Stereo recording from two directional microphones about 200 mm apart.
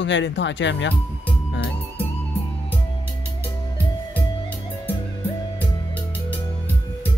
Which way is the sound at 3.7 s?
10° left (ahead or behind).